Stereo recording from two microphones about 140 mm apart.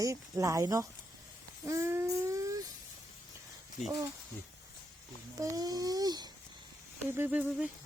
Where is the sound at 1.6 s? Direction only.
20° right (ahead or behind).